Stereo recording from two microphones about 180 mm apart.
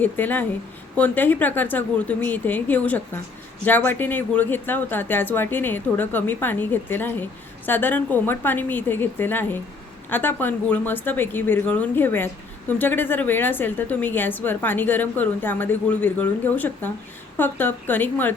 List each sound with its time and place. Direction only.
0.0 s a woman's voice: 10° left (ahead or behind)